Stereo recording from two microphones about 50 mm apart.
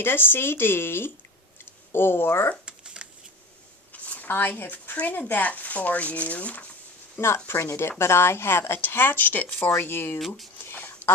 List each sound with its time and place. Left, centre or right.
0.0 s speech: left
2.6 s shuffling cards: centre
3.9 s a sound: left
4.9 s speech: left
7.2 s speech: left
10.2 s speech: centre
10.7 s a sound: left